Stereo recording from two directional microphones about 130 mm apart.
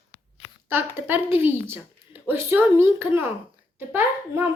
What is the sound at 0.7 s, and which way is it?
A woman's voice, 15° right (ahead or behind).